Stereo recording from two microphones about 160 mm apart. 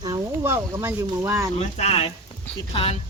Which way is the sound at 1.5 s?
40° left (ahead or behind).